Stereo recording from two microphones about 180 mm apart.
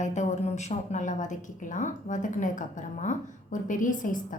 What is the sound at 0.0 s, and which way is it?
A woman's voice, 40° left (ahead or behind).